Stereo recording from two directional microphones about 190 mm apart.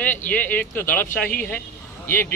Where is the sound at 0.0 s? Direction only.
10° left (ahead or behind).